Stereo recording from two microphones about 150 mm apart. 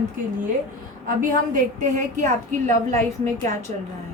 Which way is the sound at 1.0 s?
60° right (ahead or behind).